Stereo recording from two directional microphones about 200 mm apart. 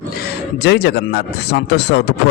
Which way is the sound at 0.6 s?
55° left (ahead or behind).